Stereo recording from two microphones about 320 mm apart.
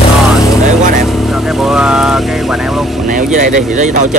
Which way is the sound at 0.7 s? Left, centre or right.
Right.